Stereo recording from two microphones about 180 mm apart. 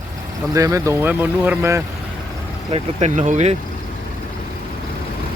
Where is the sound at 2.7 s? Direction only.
40° right (ahead or behind).